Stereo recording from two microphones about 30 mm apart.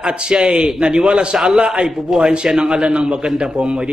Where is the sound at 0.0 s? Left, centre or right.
Right.